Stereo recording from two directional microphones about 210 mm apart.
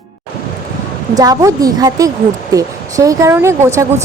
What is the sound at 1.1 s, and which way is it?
Speech, 15° right (ahead or behind).